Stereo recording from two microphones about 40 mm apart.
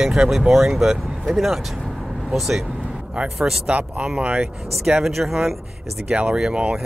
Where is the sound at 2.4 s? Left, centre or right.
Centre.